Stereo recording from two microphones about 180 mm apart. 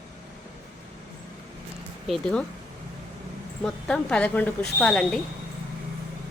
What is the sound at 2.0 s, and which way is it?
Speech, 5° left (ahead or behind).